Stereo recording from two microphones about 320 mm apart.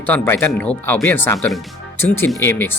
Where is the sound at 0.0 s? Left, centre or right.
Centre.